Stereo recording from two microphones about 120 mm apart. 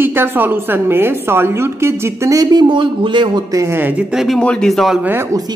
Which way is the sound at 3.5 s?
25° right (ahead or behind).